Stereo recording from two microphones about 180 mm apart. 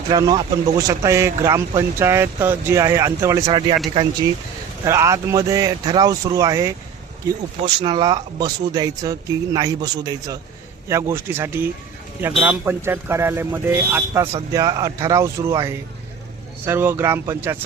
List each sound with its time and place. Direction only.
0.1 s speech: 20° right (ahead or behind)
4.9 s speech: 15° right (ahead or behind)